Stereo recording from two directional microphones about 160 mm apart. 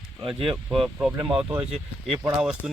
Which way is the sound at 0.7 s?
Centre (ahead or behind).